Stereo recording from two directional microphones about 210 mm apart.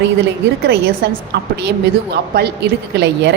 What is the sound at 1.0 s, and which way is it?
Speech, 55° right (ahead or behind).